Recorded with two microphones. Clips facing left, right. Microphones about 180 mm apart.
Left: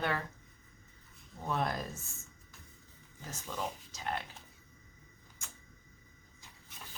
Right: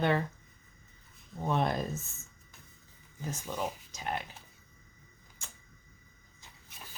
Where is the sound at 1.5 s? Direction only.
25° right (ahead or behind).